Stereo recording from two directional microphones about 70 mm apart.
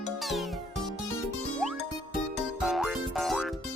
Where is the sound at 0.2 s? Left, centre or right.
Centre.